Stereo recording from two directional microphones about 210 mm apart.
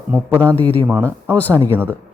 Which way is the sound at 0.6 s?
10° left (ahead or behind).